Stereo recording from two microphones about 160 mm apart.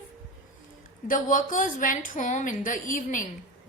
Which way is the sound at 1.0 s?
55° left (ahead or behind).